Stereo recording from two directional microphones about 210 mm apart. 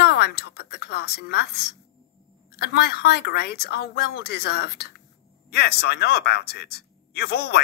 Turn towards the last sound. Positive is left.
turn(degrees=50)  # may be behind; listen again after turning